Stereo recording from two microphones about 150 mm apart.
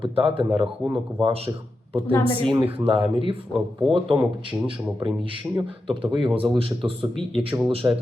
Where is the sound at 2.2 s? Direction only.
35° right (ahead or behind).